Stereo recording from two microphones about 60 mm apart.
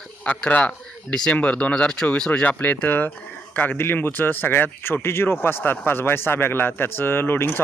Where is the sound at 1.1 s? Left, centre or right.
Centre.